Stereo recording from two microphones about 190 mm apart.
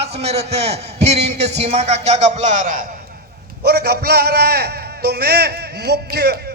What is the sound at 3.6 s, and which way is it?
A man's voice, 55° right (ahead or behind).